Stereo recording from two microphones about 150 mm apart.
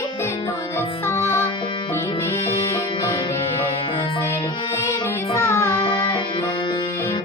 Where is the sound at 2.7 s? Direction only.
20° left (ahead or behind).